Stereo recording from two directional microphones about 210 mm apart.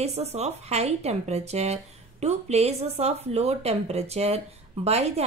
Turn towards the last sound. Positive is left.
turn(degrees=-30)  # may be behind; listen again after turning